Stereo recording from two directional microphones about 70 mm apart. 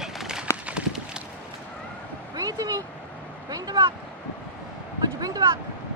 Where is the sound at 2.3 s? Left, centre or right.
Right.